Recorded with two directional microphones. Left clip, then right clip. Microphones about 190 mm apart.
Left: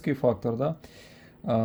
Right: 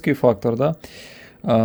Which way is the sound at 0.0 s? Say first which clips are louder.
Right 8 dB; 40° right (ahead or behind).